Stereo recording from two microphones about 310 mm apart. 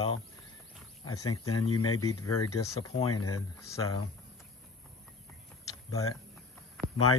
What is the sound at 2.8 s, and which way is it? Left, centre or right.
Speech, centre.